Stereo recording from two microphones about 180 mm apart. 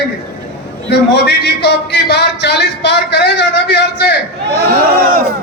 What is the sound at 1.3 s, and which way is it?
Speech, 70° left (ahead or behind).